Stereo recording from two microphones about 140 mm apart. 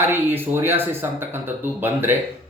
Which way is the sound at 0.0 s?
15° right (ahead or behind).